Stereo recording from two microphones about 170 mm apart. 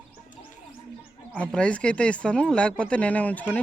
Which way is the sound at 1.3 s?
5° left (ahead or behind).